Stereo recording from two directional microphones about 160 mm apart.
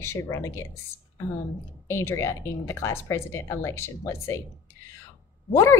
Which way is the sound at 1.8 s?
15° left (ahead or behind).